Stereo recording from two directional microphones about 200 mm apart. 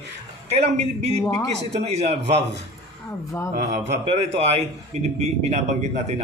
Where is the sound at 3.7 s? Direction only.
35° right (ahead or behind).